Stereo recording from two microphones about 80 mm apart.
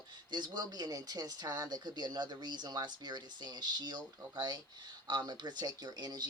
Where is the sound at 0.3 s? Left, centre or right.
Right.